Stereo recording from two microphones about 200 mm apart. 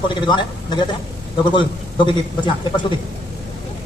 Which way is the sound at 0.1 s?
20° left (ahead or behind).